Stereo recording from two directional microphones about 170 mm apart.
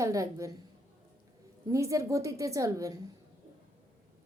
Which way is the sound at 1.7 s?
20° right (ahead or behind).